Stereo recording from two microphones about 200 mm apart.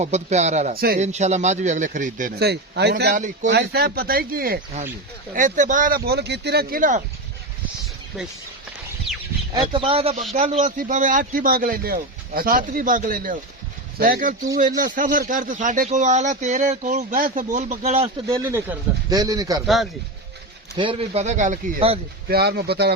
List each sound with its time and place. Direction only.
0.0 s speech: 35° right (ahead or behind)
3.5 s a man's voice: 55° right (ahead or behind)
9.6 s a man's voice: 25° right (ahead or behind)
18.3 s speech: 15° right (ahead or behind)
19.6 s speech: centre (ahead or behind)
20.7 s speech: 25° right (ahead or behind)
22.3 s a man's voice: 50° right (ahead or behind)